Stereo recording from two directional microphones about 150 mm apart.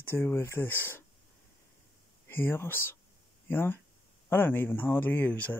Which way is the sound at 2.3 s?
15° left (ahead or behind).